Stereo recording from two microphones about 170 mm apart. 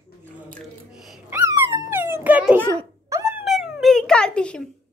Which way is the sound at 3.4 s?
5° right (ahead or behind).